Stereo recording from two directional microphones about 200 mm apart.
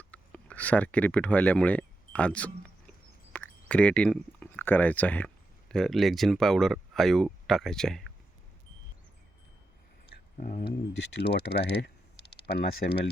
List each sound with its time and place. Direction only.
0.0 s a sound: 5° left (ahead or behind)
3.3 s speech: 5° left (ahead or behind)
10.3 s speech: 35° left (ahead or behind)
11.2 s speech: 60° left (ahead or behind)